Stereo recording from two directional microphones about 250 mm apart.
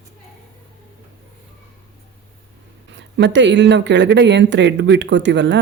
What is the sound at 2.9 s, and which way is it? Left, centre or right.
Speech, right.